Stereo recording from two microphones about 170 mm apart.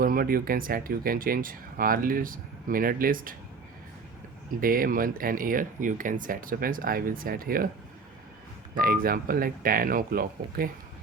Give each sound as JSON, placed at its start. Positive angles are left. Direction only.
{"t": 0.0, "sound": "speech", "side_deg": -60}
{"t": 4.6, "sound": "speech", "side_deg": -55}
{"t": 8.7, "sound": "speech", "side_deg": -60}